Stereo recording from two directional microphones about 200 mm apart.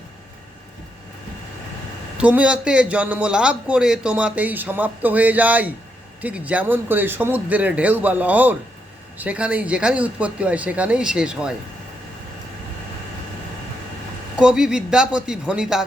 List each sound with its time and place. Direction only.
2.1 s a man's voice: 5° right (ahead or behind)
14.3 s speech: 5° right (ahead or behind)